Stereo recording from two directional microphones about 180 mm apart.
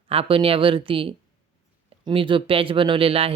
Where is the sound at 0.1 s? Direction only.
30° right (ahead or behind).